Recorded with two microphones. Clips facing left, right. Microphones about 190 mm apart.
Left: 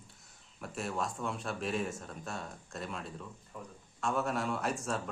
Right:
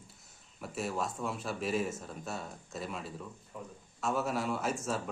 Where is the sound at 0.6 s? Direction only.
Centre (ahead or behind).